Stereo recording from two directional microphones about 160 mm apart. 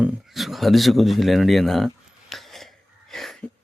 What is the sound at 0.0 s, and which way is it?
Speech, 5° right (ahead or behind).